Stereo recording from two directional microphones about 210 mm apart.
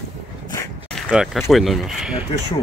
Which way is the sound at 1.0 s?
5° right (ahead or behind).